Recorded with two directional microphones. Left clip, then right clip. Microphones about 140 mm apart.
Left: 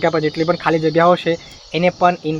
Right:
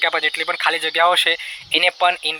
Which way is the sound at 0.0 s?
25° right (ahead or behind).